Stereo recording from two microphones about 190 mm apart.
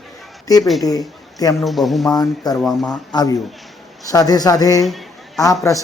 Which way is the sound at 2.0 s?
20° left (ahead or behind).